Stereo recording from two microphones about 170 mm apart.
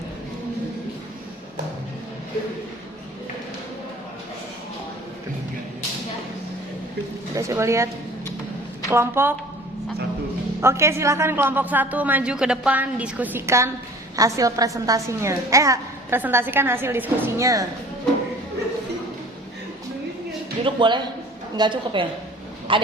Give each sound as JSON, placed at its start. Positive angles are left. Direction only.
{"t": 7.3, "sound": "a woman's voice", "side_deg": -15}
{"t": 10.6, "sound": "a woman's voice", "side_deg": -15}
{"t": 20.7, "sound": "a woman's voice", "side_deg": -30}